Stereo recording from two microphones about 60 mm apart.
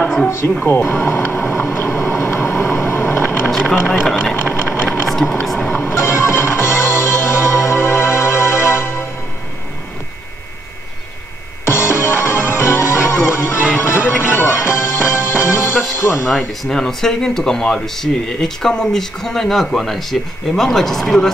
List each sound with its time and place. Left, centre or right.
0.7 s speech: left
1.0 s vehicle: left
3.4 s vehicle: centre
4.4 s a sound: left
5.0 s a sound: centre
5.7 s music: left
11.6 s music: left
16.6 s speech: centre